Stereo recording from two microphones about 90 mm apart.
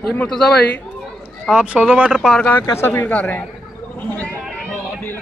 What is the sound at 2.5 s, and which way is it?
Speech, 25° left (ahead or behind).